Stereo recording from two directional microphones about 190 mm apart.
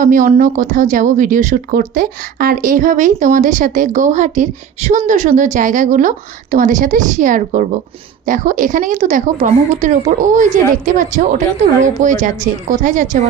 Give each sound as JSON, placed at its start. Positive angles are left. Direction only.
{"t": 0.0, "sound": "a woman's voice", "side_deg": -45}